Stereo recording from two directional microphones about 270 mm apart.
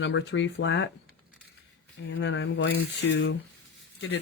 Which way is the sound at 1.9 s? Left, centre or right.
Left.